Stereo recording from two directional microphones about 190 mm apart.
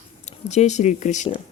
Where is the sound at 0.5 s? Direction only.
35° left (ahead or behind).